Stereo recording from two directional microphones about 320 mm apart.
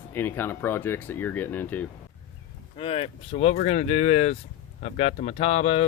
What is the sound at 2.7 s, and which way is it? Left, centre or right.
Speech, centre.